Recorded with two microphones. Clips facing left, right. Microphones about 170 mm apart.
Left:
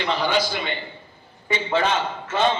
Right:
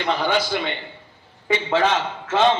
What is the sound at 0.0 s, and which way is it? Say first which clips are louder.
Speech: right 1 dB; 55° right (ahead or behind).